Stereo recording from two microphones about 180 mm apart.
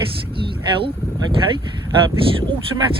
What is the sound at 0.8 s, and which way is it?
Speech, 25° right (ahead or behind).